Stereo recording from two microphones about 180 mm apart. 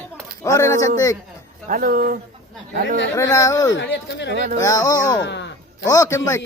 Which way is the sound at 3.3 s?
15° left (ahead or behind).